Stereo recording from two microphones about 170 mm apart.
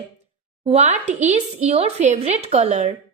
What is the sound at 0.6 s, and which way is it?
Speech, 35° right (ahead or behind).